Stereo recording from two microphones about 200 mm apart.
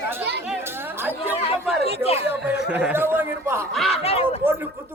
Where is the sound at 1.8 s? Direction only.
30° left (ahead or behind).